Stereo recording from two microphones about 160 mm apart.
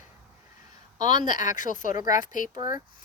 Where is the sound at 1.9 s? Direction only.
20° right (ahead or behind).